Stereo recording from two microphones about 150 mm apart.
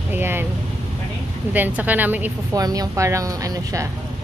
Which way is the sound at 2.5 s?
25° right (ahead or behind).